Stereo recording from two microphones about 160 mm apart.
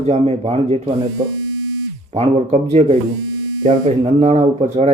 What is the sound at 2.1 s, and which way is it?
Speech, 40° right (ahead or behind).